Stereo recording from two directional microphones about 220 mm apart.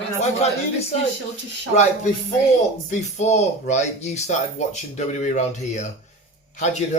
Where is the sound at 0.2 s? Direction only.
30° left (ahead or behind).